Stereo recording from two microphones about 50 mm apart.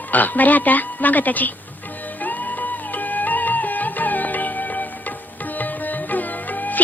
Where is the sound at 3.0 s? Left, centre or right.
Left.